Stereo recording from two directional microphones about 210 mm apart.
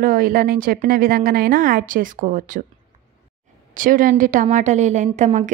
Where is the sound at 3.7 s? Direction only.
40° right (ahead or behind).